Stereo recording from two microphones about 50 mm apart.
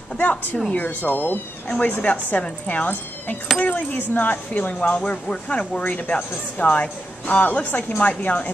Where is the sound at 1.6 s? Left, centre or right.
Left.